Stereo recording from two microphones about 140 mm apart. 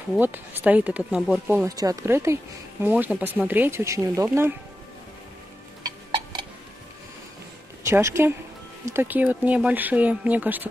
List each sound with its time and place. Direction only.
0.2 s speech: 15° right (ahead or behind)
1.8 s speech: 25° right (ahead or behind)
5.9 s a sound: 30° right (ahead or behind)
7.8 s speech: 20° right (ahead or behind)